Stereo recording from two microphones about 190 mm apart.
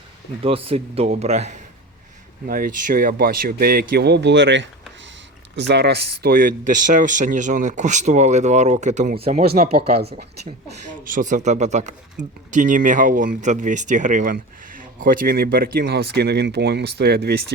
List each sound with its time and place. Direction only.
0.4 s speech: 30° right (ahead or behind)
2.5 s speech: 45° right (ahead or behind)
9.4 s speech: 55° right (ahead or behind)
11.0 s speech: 45° right (ahead or behind)